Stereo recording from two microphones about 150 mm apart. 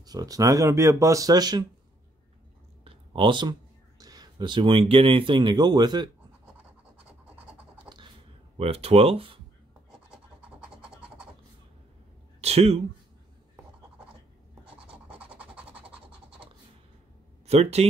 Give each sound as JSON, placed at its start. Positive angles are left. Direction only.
{"t": 0.0, "sound": "speech", "side_deg": -25}
{"t": 2.8, "sound": "a sound", "side_deg": -35}
{"t": 4.0, "sound": "speech", "side_deg": -25}
{"t": 7.8, "sound": "computer keyboard", "side_deg": -30}
{"t": 8.5, "sound": "speech", "side_deg": -40}
{"t": 9.8, "sound": "a sound", "side_deg": -5}
{"t": 12.4, "sound": "speech", "side_deg": -45}
{"t": 14.6, "sound": "scratch", "side_deg": -10}
{"t": 17.5, "sound": "speech", "side_deg": -45}